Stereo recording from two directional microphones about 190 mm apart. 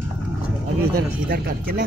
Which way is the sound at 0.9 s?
55° right (ahead or behind).